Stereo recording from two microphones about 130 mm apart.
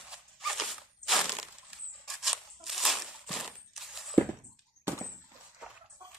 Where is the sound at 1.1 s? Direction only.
Centre (ahead or behind).